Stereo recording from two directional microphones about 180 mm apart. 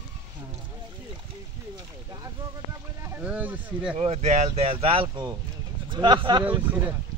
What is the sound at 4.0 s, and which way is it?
Speech, 35° right (ahead or behind).